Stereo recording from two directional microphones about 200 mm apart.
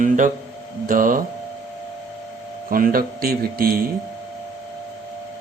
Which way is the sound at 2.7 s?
45° right (ahead or behind).